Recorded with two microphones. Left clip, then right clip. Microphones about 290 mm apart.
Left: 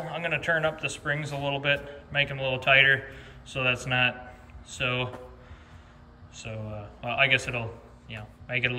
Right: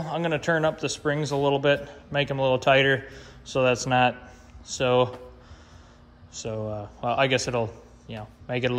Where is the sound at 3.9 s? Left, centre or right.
Centre.